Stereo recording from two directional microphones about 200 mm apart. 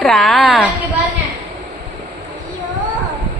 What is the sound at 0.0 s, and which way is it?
Speech, centre (ahead or behind).